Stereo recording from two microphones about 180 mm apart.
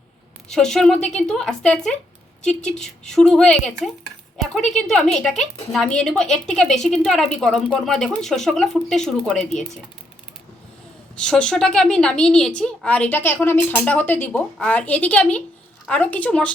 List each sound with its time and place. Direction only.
0.4 s a woman's voice: 5° left (ahead or behind)
11.2 s a woman's voice: 5° left (ahead or behind)